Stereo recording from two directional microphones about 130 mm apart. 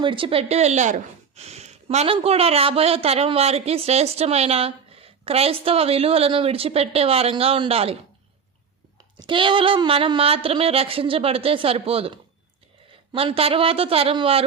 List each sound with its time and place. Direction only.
0.0 s speech: 40° right (ahead or behind)
9.1 s speech: 40° right (ahead or behind)